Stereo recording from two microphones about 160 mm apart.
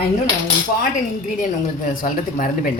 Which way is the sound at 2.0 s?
55° left (ahead or behind).